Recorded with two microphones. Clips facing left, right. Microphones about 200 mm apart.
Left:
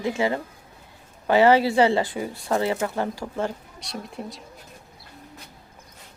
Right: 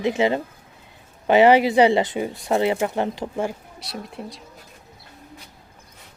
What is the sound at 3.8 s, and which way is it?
Speech, centre (ahead or behind).